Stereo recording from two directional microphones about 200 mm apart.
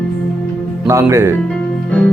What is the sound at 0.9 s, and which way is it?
Speech, 15° right (ahead or behind).